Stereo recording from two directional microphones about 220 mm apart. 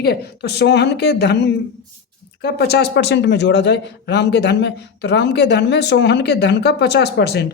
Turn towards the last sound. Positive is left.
turn(degrees=50)  # may be behind; listen again after turning